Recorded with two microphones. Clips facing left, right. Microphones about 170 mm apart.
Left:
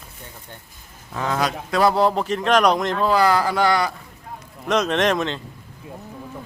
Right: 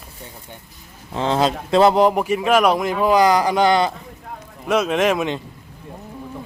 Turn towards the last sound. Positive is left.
turn(degrees=-10)  # may be behind; listen again after turning